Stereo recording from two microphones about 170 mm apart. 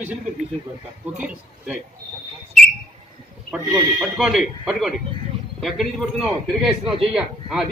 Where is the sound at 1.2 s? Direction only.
5° right (ahead or behind).